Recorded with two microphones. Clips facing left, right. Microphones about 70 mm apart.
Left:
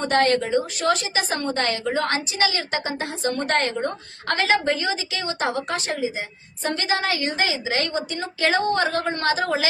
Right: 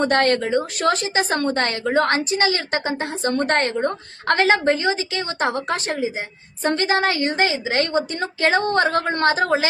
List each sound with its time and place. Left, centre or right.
0.0 s a woman's voice: right